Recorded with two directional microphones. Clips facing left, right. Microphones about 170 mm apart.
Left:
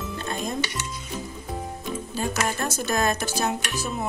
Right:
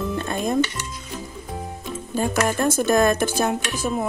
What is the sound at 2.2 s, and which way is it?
Speech, 50° right (ahead or behind).